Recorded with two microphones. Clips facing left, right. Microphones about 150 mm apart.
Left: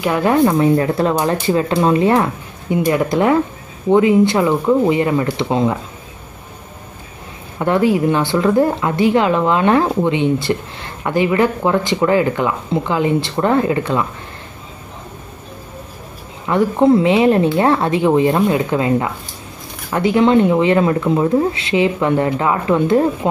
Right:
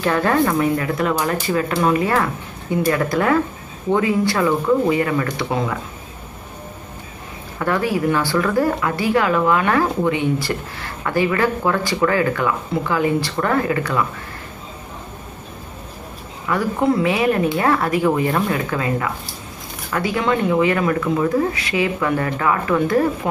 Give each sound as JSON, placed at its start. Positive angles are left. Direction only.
{"t": 0.0, "sound": "speech", "side_deg": 15}
{"t": 7.5, "sound": "speech", "side_deg": 20}
{"t": 16.4, "sound": "speech", "side_deg": 25}